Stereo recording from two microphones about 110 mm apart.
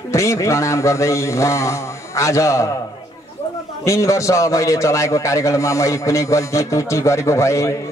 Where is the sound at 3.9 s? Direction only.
30° left (ahead or behind).